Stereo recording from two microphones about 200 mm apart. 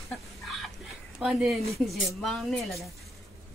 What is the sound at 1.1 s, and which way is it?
A woman's voice, centre (ahead or behind).